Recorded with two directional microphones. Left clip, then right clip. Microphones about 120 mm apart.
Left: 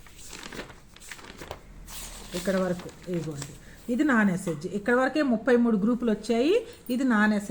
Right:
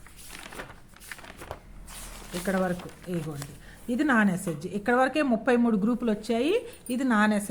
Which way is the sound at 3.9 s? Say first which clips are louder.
Even; 15° right (ahead or behind).